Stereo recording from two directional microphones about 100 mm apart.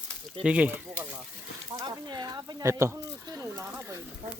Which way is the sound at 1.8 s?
45° right (ahead or behind).